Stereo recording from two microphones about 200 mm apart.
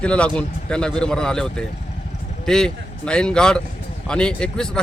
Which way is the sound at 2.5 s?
5° left (ahead or behind).